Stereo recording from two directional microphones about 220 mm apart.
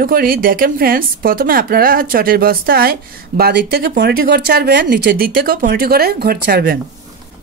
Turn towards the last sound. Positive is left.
turn(degrees=-45)  # may be behind; listen again after turning